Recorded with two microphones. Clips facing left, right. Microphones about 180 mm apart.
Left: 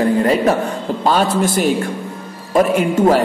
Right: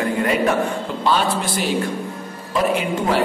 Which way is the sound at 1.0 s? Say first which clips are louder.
Left 5 dB; 45° left (ahead or behind).